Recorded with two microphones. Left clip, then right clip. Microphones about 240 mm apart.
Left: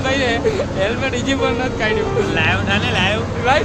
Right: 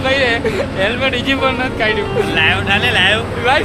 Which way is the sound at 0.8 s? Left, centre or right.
Right.